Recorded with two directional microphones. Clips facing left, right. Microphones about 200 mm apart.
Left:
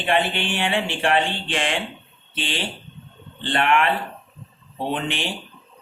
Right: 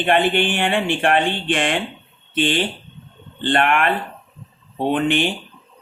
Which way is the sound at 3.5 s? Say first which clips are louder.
Right 2 dB; 55° right (ahead or behind).